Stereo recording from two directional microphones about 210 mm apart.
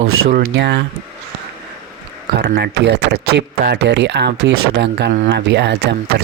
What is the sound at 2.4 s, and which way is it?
Speech, 55° right (ahead or behind).